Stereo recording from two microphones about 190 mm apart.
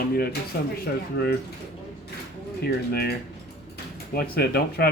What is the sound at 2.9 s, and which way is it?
Speech, 55° left (ahead or behind).